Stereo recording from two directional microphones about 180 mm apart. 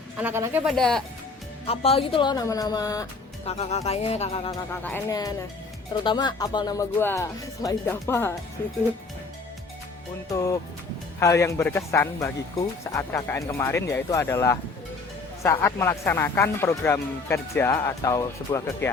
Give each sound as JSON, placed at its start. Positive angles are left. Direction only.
{"t": 0.2, "sound": "speech", "side_deg": -10}
{"t": 0.7, "sound": "speech", "side_deg": 5}
{"t": 1.6, "sound": "speech", "side_deg": 30}
{"t": 3.4, "sound": "speech", "side_deg": 35}
{"t": 4.7, "sound": "speech", "side_deg": 10}
{"t": 10.3, "sound": "speech", "side_deg": 15}
{"t": 15.6, "sound": "speech", "side_deg": 15}